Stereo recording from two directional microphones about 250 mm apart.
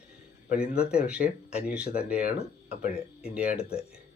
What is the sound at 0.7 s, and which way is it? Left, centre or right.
Speech, centre.